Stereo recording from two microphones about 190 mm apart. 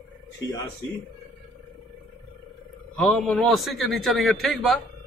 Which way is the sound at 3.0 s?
Centre (ahead or behind).